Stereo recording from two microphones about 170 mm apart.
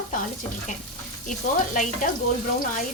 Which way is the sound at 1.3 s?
50° left (ahead or behind).